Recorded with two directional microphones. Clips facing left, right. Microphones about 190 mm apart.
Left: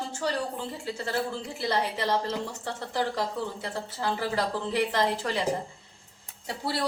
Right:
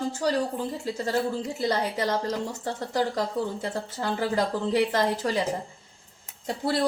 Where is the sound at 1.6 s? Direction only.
45° right (ahead or behind).